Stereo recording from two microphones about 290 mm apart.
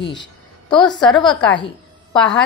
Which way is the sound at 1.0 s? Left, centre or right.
Centre.